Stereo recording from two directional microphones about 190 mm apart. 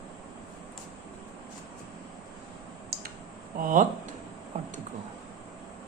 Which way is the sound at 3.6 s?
45° right (ahead or behind).